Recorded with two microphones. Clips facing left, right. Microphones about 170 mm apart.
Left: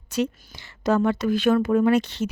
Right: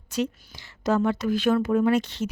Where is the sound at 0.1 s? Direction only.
70° left (ahead or behind).